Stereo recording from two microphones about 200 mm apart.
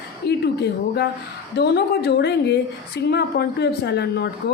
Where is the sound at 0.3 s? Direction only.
55° left (ahead or behind).